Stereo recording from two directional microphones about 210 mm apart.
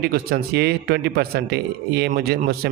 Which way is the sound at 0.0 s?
45° right (ahead or behind).